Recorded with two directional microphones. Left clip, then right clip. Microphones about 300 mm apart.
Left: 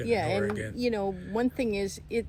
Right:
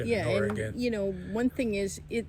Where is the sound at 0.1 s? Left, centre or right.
Centre.